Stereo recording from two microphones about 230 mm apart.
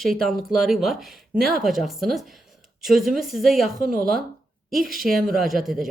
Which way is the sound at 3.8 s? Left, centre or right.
Right.